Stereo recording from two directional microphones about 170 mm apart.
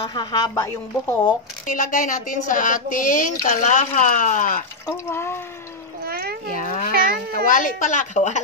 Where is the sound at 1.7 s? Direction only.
55° left (ahead or behind).